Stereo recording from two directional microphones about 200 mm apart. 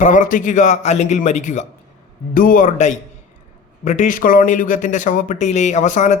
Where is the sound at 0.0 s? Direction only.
40° left (ahead or behind).